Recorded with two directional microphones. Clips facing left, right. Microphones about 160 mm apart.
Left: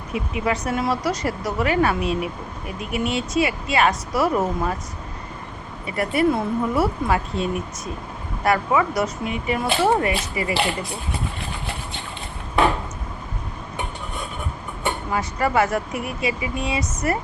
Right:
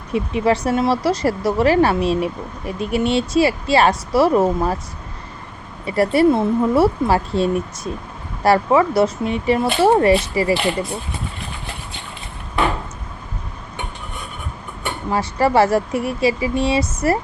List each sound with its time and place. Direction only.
0.1 s speech: 30° right (ahead or behind)
5.8 s speech: 30° right (ahead or behind)
15.1 s speech: 30° right (ahead or behind)